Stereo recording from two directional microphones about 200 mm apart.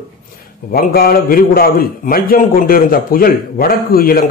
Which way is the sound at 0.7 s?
50° left (ahead or behind).